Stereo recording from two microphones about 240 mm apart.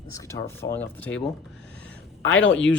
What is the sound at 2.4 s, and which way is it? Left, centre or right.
Speech, left.